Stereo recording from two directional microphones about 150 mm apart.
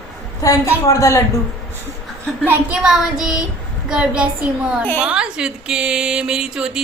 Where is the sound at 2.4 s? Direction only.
10° right (ahead or behind).